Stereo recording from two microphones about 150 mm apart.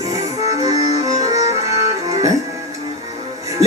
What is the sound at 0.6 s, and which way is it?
Music, 20° right (ahead or behind).